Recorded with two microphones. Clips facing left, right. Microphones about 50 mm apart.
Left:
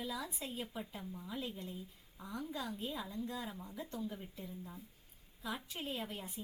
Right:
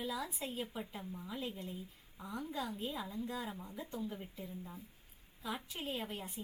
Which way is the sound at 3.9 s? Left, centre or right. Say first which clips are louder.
Right 2 dB; centre.